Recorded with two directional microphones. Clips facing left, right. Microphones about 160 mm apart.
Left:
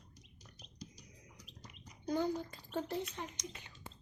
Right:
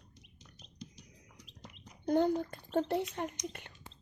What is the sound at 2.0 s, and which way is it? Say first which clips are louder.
Speech: right 6 dB; 60° right (ahead or behind).